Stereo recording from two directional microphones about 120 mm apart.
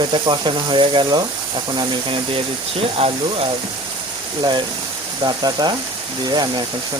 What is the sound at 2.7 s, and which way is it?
Speech, 55° right (ahead or behind).